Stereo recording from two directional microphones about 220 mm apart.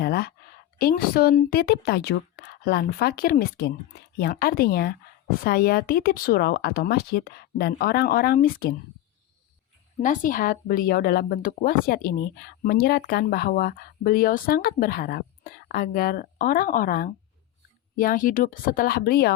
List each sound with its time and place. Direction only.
0.0 s a sound: 45° left (ahead or behind)
0.8 s a woman's voice: 45° left (ahead or behind)
10.0 s speech: 35° left (ahead or behind)